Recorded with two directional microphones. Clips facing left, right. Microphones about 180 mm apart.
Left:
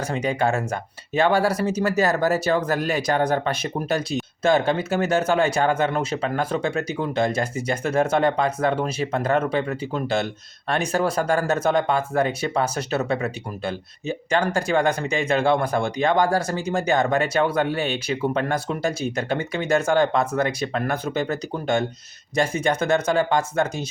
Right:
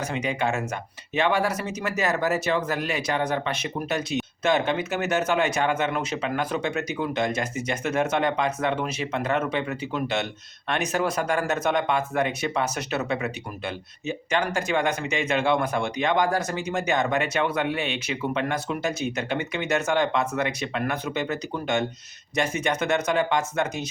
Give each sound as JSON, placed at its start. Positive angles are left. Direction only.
{"t": 0.0, "sound": "speech", "side_deg": 35}